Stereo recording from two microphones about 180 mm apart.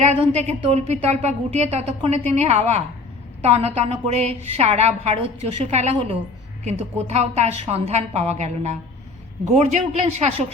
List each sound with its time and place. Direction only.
0.0 s speech: 40° right (ahead or behind)